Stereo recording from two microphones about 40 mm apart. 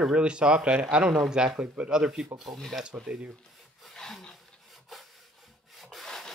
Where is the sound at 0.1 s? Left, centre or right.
Right.